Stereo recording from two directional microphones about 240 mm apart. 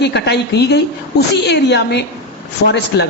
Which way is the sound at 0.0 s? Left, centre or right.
Left.